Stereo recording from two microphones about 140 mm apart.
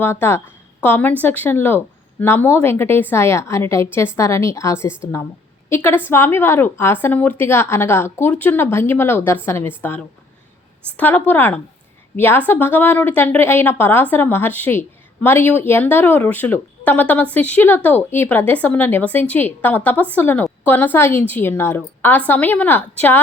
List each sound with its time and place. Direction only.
0.0 s a woman's voice: 15° left (ahead or behind)